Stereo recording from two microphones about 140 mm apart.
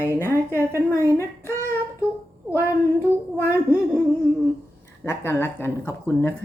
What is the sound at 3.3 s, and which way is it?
Speech, 15° left (ahead or behind).